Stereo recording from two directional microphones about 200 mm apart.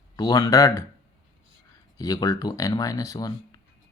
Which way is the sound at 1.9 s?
20° left (ahead or behind).